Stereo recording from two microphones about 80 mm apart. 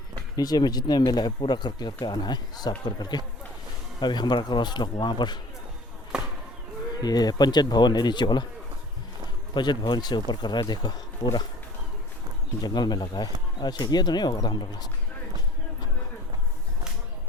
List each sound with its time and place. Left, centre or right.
0.3 s speech: left
6.1 s chop: centre
7.0 s speech: left
9.6 s speech: left
12.6 s speech: left